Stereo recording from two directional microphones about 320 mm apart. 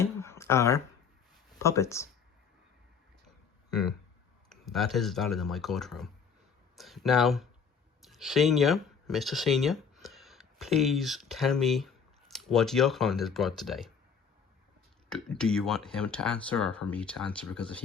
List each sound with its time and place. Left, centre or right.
0.0 s a sound: centre
1.5 s speech: centre
3.7 s speech: centre
15.1 s speech: centre